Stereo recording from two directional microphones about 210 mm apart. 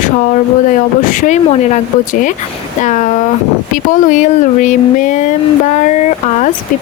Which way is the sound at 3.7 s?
40° left (ahead or behind).